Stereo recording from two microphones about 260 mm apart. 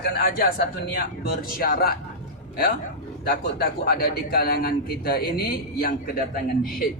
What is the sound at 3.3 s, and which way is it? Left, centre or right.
A man's voice, left.